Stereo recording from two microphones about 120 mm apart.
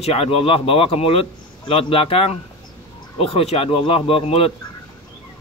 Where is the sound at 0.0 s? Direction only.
55° left (ahead or behind).